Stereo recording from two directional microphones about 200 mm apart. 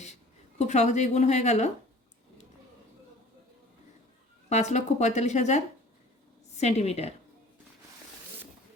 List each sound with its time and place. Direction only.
0.6 s speech: 35° left (ahead or behind)
4.4 s speech: 35° left (ahead or behind)